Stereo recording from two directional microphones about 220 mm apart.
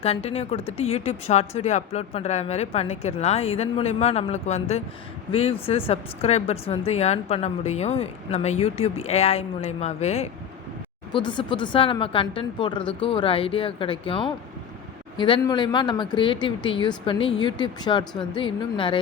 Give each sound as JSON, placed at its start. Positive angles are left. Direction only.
{"t": 0.0, "sound": "a woman's voice", "side_deg": 30}